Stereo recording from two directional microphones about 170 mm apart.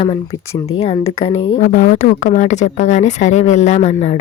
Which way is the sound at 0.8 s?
35° left (ahead or behind).